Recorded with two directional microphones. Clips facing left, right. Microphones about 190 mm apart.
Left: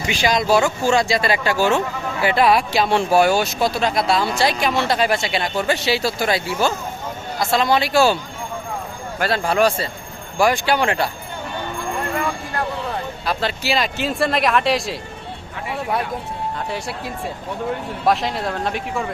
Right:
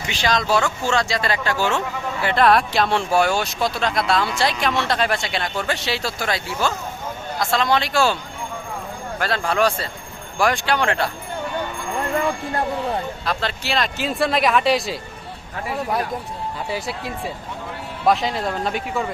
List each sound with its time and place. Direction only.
0.1 s speech: 10° left (ahead or behind)
9.1 s speech: 5° left (ahead or behind)
13.2 s speech: 5° left (ahead or behind)
16.6 s speech: centre (ahead or behind)